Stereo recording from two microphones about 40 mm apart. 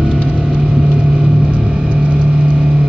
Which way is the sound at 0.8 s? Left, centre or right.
Right.